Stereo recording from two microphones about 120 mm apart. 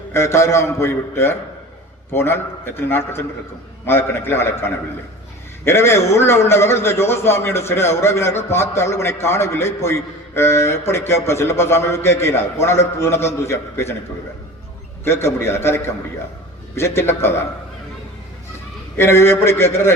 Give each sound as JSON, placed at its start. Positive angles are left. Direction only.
{"t": 0.1, "sound": "a man's voice", "side_deg": 25}
{"t": 15.0, "sound": "a man's voice", "side_deg": 20}
{"t": 18.9, "sound": "a man's voice", "side_deg": 20}